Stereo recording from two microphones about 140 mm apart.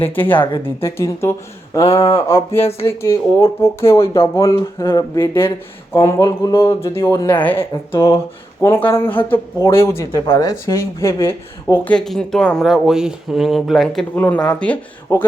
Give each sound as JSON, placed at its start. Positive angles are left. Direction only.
{"t": 0.0, "sound": "speech", "side_deg": 15}
{"t": 14.2, "sound": "speech", "side_deg": 10}